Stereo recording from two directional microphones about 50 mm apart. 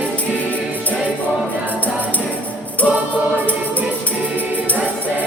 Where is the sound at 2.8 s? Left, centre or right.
Left.